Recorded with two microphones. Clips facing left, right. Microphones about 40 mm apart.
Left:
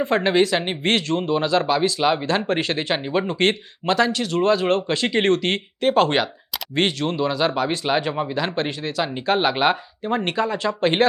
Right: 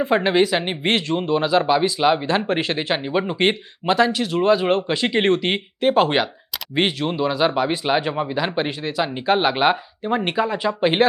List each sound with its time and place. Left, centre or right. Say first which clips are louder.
0.0 s speech: right 1 dB; centre